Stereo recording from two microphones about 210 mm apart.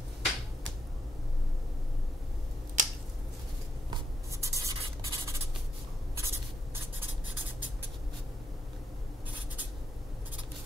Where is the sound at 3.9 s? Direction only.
15° right (ahead or behind).